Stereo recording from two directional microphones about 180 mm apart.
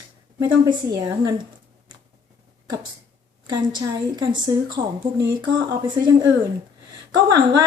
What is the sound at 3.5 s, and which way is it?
A woman's voice, 25° right (ahead or behind).